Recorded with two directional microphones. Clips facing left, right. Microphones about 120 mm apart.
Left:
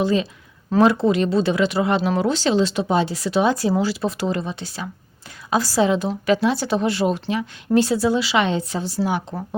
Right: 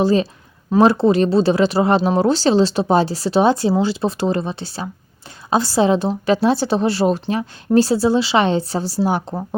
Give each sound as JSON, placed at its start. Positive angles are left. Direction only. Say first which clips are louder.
{"t": 0.0, "sound": "speech", "louder": "right 4 dB", "side_deg": -35}